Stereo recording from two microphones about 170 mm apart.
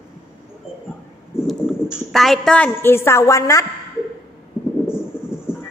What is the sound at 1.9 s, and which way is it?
A woman's voice, centre (ahead or behind).